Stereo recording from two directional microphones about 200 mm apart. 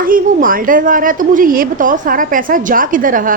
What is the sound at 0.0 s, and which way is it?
A woman's voice, 45° right (ahead or behind).